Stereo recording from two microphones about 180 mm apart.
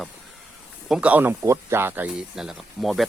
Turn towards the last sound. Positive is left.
turn(degrees=0)  # may be behind; listen again after turning